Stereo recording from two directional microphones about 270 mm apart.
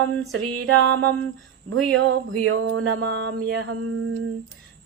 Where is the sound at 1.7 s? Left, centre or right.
Right.